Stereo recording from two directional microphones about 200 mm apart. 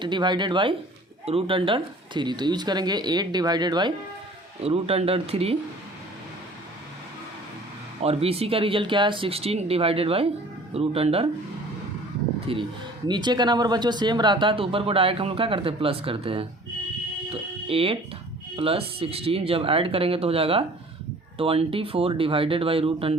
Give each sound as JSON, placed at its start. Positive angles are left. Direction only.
{"t": 0.0, "sound": "speech", "side_deg": -20}
{"t": 8.0, "sound": "speech", "side_deg": -30}
{"t": 12.5, "sound": "speech", "side_deg": -25}
{"t": 17.2, "sound": "music", "side_deg": -30}
{"t": 18.5, "sound": "speech", "side_deg": -30}